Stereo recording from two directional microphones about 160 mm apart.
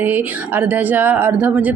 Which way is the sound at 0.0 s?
10° right (ahead or behind).